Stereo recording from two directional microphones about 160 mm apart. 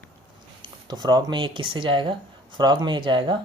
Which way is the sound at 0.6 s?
25° right (ahead or behind).